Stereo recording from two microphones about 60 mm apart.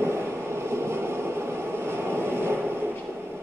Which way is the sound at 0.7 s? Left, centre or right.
Right.